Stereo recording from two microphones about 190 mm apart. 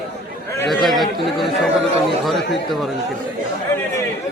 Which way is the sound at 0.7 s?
Centre (ahead or behind).